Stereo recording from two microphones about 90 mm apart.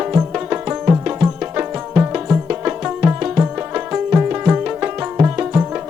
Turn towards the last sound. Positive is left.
turn(degrees=-20)  # may be behind; listen again after turning